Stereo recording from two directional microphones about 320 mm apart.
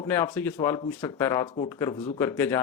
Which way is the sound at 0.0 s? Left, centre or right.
Centre.